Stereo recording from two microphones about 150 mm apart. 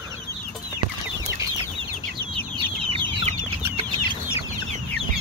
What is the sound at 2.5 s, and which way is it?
Chicken, 35° right (ahead or behind).